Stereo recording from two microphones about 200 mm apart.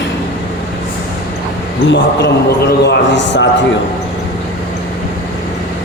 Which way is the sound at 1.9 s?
60° left (ahead or behind).